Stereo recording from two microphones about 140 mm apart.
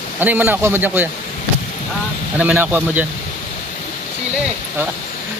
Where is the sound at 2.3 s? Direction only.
10° right (ahead or behind).